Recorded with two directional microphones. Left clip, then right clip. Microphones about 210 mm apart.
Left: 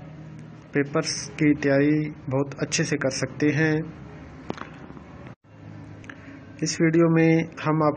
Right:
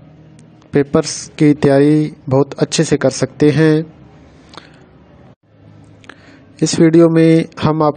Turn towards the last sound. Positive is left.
turn(degrees=-60)  # may be behind; listen again after turning